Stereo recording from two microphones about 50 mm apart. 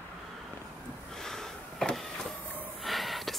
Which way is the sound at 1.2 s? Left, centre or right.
Centre.